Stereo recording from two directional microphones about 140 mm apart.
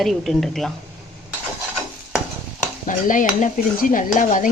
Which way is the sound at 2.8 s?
70° left (ahead or behind).